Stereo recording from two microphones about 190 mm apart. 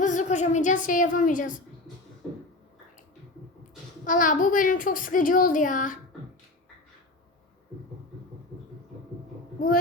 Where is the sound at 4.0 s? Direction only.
45° left (ahead or behind).